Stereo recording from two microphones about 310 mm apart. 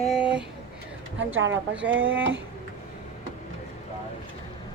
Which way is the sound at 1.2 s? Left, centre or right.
Right.